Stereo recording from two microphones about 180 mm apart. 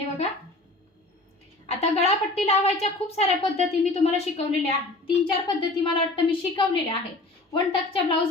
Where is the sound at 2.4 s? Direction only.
35° left (ahead or behind).